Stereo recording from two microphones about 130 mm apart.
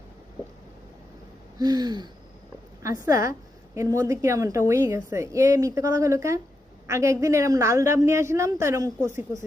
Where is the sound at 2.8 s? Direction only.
25° right (ahead or behind).